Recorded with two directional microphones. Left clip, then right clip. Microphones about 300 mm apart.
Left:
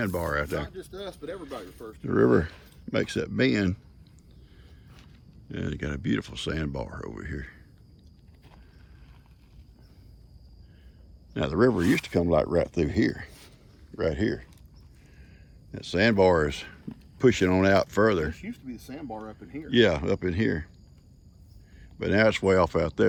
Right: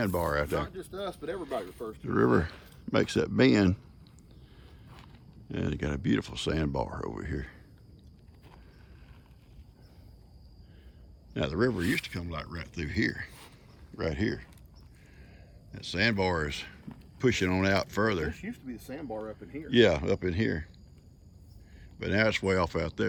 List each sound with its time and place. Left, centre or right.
0.0 s speech: centre
0.8 s speech: centre
2.0 s speech: centre
5.5 s speech: centre
11.3 s speech: centre
15.7 s speech: centre
21.9 s speech: centre